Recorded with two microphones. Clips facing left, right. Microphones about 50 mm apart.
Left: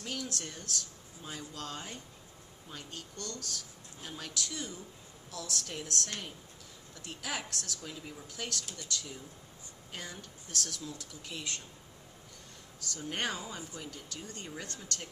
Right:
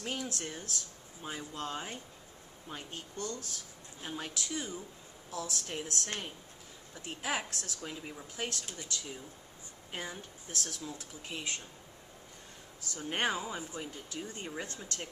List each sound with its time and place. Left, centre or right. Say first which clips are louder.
0.0 s speech: right 1 dB; right
12.9 s speech: right 3 dB; right